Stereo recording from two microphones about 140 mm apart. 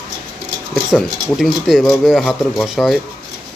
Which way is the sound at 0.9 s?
Centre (ahead or behind).